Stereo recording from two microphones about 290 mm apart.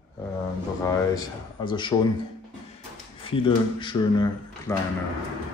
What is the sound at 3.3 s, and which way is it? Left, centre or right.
Speech, centre.